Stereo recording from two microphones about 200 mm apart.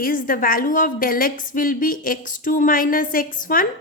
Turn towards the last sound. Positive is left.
turn(degrees=45)  # may be behind; listen again after turning